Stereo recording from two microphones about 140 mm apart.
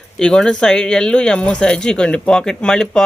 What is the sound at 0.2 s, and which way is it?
Speech, 5° left (ahead or behind).